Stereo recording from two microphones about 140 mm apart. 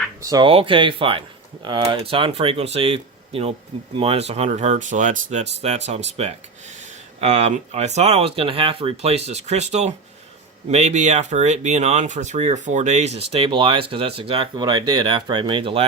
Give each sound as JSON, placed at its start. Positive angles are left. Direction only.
{"t": 0.2, "sound": "speech", "side_deg": -25}
{"t": 0.4, "sound": "speech", "side_deg": -40}